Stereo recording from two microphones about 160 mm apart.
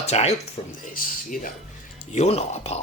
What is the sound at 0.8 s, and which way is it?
Speech, 60° left (ahead or behind).